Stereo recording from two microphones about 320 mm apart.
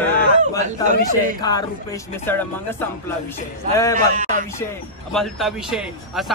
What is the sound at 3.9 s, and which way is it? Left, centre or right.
Speech, right.